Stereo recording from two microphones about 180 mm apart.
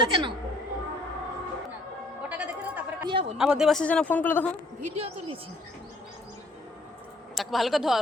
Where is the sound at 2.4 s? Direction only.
10° right (ahead or behind).